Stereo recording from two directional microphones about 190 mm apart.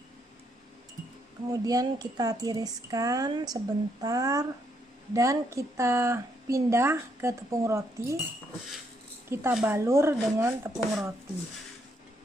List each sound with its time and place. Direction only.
1.5 s a woman's voice: 20° right (ahead or behind)
9.3 s a woman's voice: 15° right (ahead or behind)